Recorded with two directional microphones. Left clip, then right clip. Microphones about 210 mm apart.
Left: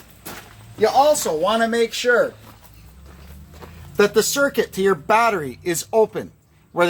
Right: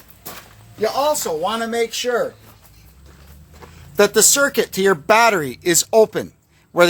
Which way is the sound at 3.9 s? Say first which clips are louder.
Right 3 dB; 50° right (ahead or behind).